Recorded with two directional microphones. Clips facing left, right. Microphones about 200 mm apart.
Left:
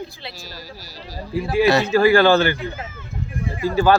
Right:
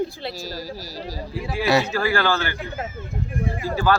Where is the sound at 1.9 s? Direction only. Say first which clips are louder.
Left 8 dB; 20° left (ahead or behind).